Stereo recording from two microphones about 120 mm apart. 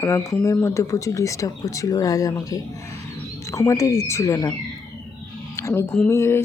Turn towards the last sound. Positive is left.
turn(degrees=20)  # may be behind; listen again after turning